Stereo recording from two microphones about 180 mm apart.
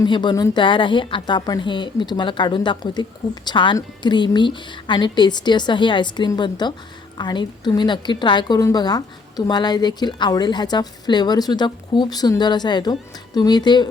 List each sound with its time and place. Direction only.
0.0 s a woman's voice: 25° left (ahead or behind)